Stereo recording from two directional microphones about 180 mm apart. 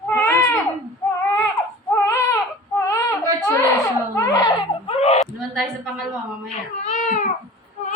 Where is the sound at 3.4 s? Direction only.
15° left (ahead or behind).